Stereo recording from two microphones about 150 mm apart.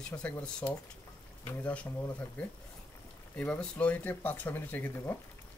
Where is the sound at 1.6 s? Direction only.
10° left (ahead or behind).